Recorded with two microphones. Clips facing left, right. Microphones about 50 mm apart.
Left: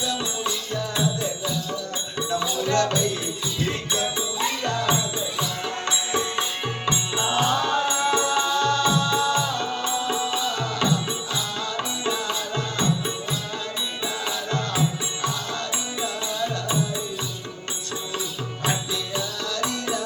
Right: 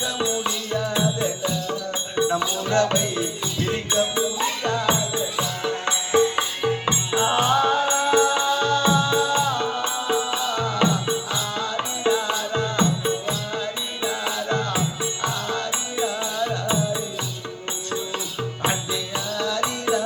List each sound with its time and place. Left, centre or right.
0.0 s music: right
2.1 s music: centre
4.6 s music: centre
6.8 s music: right
14.0 s music: centre
18.6 s music: right